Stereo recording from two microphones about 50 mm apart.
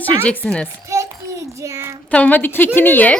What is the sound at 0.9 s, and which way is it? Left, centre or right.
Child singing, right.